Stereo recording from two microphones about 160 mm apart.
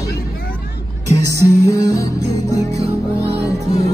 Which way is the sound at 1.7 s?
20° left (ahead or behind).